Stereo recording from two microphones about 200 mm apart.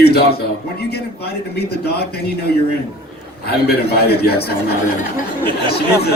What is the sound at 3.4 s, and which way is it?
A man's voice, 50° left (ahead or behind).